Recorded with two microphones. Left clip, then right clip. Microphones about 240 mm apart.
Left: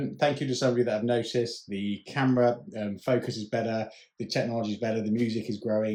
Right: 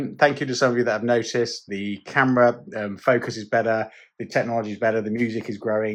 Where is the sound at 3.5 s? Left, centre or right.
Right.